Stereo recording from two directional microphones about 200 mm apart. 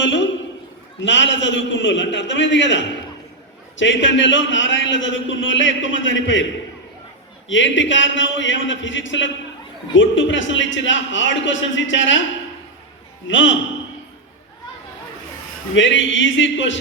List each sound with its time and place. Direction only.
0.0 s a sound: 65° left (ahead or behind)
1.0 s a man's voice: 65° left (ahead or behind)
7.4 s a man's voice: 70° left (ahead or behind)
13.2 s a man's voice: 70° left (ahead or behind)
15.7 s a man's voice: 65° left (ahead or behind)